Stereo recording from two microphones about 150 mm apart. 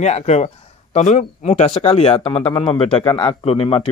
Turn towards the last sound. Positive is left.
turn(degrees=40)  # may be behind; listen again after turning